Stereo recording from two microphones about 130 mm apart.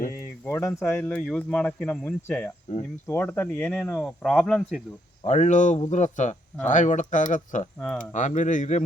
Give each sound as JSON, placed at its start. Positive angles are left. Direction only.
{"t": 0.1, "sound": "speech", "side_deg": 20}
{"t": 5.2, "sound": "speech", "side_deg": 60}